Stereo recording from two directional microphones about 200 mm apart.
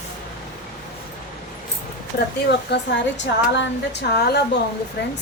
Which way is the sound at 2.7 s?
60° left (ahead or behind).